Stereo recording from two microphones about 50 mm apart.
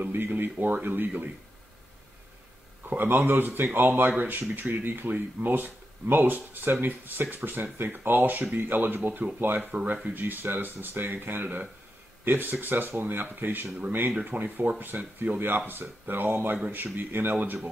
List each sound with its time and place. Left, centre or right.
0.0 s speech: right
2.9 s speech: right